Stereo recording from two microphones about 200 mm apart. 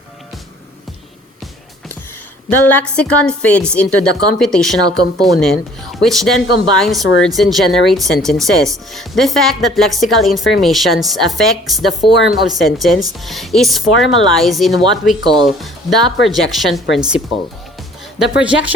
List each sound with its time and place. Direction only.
2.5 s a woman's voice: 10° left (ahead or behind)
15.2 s speech: 20° right (ahead or behind)
15.4 s a woman's voice: centre (ahead or behind)
18.2 s a woman's voice: 5° right (ahead or behind)